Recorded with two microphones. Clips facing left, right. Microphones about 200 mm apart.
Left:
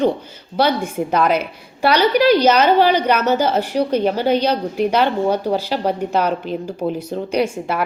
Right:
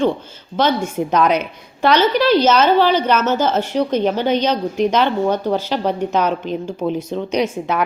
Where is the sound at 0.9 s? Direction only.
5° left (ahead or behind).